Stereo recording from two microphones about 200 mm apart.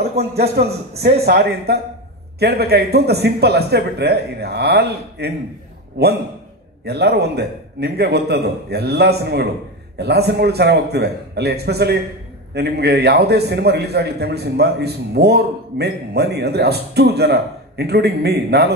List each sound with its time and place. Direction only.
0.2 s a man's voice: 50° right (ahead or behind)